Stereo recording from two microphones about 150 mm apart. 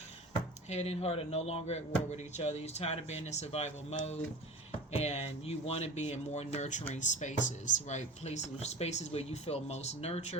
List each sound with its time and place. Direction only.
0.7 s speech: 45° left (ahead or behind)